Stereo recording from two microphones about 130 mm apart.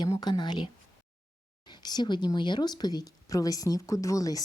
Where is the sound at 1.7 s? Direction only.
35° left (ahead or behind).